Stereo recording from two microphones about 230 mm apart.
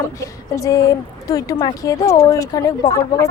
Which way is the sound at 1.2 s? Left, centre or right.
Centre.